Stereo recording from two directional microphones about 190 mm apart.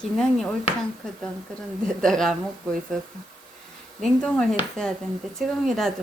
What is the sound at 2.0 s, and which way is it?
Speech, 5° left (ahead or behind).